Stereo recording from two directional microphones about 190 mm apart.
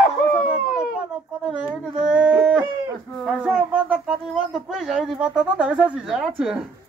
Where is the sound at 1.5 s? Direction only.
5° right (ahead or behind).